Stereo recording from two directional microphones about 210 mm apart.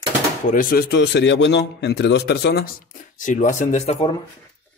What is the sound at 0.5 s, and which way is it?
A man's voice, 40° left (ahead or behind).